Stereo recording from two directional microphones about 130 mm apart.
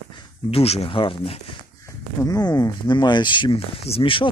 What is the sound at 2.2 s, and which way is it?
Speech, 25° left (ahead or behind).